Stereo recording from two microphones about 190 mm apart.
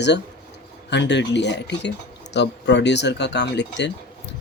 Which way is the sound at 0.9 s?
65° left (ahead or behind).